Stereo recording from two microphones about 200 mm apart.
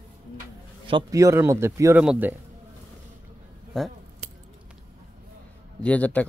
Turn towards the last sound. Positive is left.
turn(degrees=5)  # may be behind; listen again after turning